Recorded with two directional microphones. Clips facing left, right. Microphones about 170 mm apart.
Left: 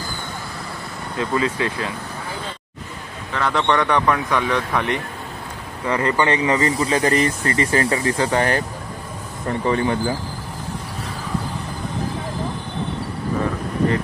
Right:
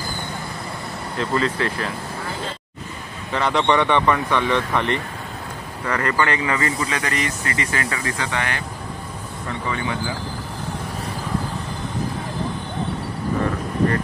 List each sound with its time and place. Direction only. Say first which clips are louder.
1.1 s speech: left 1 dB; 15° left (ahead or behind)
3.3 s speech: right 1 dB; centre (ahead or behind); by 6.6 s 20° left (ahead or behind)
6.6 s speech: left 5 dB; 35° left (ahead or behind)